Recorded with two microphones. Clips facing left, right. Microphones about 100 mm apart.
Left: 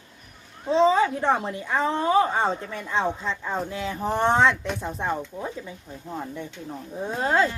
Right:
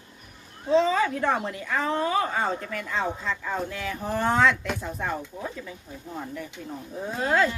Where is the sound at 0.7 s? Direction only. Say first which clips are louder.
Left 2 dB; 30° left (ahead or behind).